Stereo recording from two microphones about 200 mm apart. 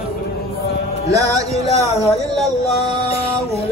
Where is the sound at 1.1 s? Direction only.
15° right (ahead or behind).